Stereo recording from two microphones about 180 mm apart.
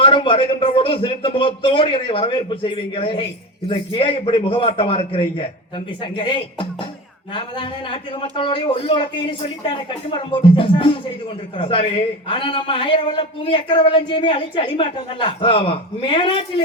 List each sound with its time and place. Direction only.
0.0 s a man's voice: 30° left (ahead or behind)